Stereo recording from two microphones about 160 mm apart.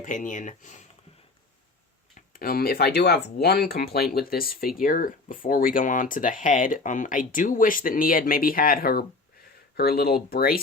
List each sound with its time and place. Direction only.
0.0 s speech: 55° left (ahead or behind)
2.3 s speech: 65° left (ahead or behind)